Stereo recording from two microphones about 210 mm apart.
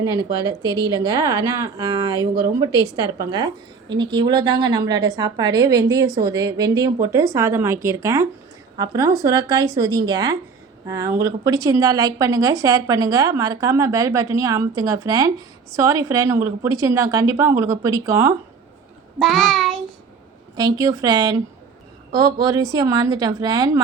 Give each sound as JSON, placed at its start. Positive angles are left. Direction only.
{"t": 0.0, "sound": "a woman's voice", "side_deg": -15}
{"t": 19.2, "sound": "child singing", "side_deg": 0}
{"t": 20.6, "sound": "a woman's voice", "side_deg": -20}